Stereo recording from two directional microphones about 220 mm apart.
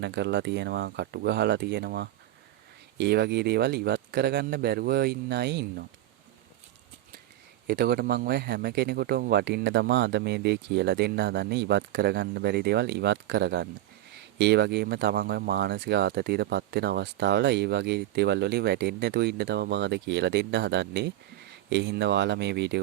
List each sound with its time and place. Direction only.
0.0 s speech: 50° right (ahead or behind)
7.7 s speech: 45° right (ahead or behind)